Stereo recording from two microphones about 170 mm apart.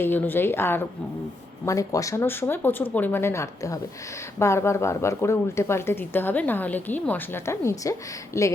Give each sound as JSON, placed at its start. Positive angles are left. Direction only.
{"t": 0.0, "sound": "speech", "side_deg": 10}